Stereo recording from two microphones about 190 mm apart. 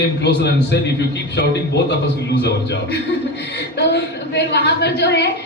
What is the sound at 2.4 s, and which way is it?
A woman's voice, 60° left (ahead or behind).